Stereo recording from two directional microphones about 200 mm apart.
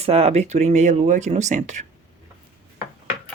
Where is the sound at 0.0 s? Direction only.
30° right (ahead or behind).